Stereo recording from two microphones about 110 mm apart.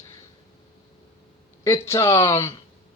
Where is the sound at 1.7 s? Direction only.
25° left (ahead or behind).